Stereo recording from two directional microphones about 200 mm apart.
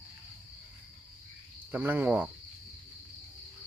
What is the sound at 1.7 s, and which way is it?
Speech, 10° right (ahead or behind).